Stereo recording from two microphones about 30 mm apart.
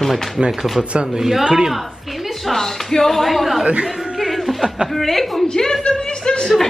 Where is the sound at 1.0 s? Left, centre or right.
Centre.